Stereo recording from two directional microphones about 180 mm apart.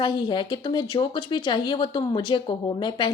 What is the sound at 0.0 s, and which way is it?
Speech, 25° left (ahead or behind).